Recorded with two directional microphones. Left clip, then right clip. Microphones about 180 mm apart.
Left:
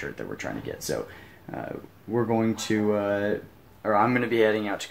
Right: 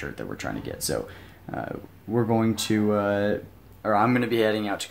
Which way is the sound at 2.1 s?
20° right (ahead or behind).